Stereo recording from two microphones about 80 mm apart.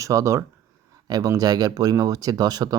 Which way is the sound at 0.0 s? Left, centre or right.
Right.